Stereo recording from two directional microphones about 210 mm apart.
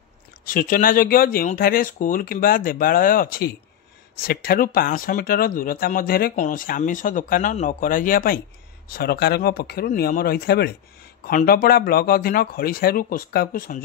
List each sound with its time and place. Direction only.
0.5 s speech: 40° left (ahead or behind)